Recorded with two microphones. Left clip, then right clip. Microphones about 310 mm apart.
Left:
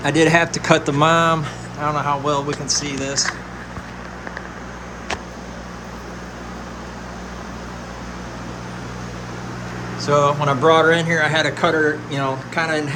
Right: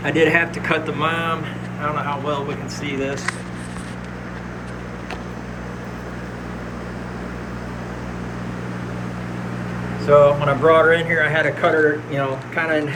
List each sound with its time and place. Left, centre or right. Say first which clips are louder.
0.0 s speech: left 1 dB; left
0.3 s speech: left 3 dB; centre
10.1 s speech: right 3 dB; centre